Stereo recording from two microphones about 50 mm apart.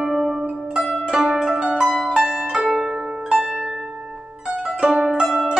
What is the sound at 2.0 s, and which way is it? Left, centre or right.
Pizzicato, centre.